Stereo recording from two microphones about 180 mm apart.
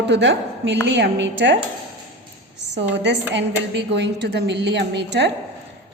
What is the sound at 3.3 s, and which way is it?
A woman's voice, 75° right (ahead or behind).